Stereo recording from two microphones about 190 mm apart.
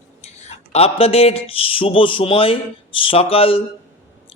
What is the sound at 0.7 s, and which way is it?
Speech, 30° left (ahead or behind).